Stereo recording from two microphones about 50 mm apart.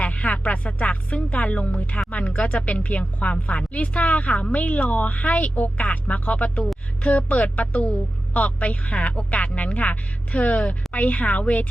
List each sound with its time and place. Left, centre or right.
0.0 s a woman's voice: left